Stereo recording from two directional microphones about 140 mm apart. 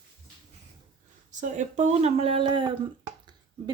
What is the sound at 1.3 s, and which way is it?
Speech, 60° right (ahead or behind).